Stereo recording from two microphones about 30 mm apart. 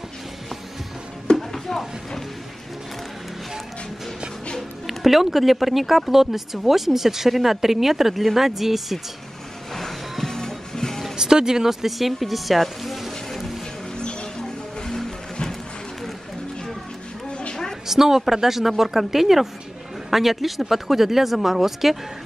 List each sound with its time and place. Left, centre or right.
1.3 s a sound: left
4.8 s speech: centre
9.8 s music: centre
10.3 s music: centre
11.1 s speech: right
11.8 s speech: centre
17.3 s a sound: left
17.8 s a woman's voice: centre